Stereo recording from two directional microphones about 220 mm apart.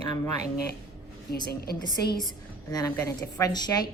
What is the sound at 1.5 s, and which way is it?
Speech, 45° left (ahead or behind).